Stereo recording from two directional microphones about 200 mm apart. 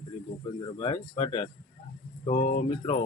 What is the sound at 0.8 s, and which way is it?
Speech, 30° left (ahead or behind).